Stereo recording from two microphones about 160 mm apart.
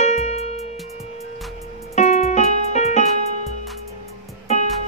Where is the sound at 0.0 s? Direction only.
45° left (ahead or behind).